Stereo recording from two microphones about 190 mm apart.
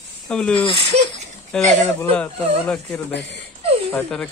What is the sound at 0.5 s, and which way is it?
Speech, 25° left (ahead or behind).